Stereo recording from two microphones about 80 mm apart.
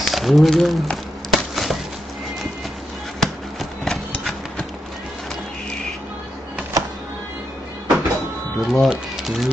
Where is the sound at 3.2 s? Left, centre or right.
Centre.